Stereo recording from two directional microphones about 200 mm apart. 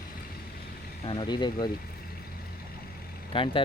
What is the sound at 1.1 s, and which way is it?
Speech, 25° left (ahead or behind).